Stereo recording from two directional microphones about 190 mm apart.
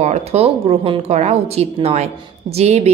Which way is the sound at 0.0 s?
35° right (ahead or behind).